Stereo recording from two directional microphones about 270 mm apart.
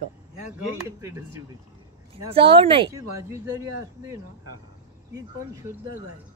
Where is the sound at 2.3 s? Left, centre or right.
Centre.